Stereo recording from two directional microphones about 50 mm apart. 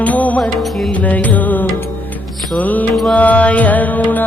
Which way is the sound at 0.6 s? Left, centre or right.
Centre.